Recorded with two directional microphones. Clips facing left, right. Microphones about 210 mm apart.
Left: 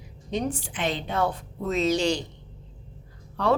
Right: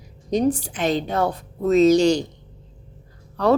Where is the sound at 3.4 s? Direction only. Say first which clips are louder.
Right 5 dB; 40° right (ahead or behind).